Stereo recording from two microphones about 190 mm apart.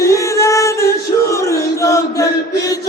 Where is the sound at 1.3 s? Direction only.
15° left (ahead or behind).